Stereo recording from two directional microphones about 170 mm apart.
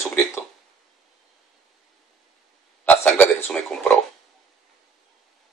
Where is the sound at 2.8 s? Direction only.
10° left (ahead or behind).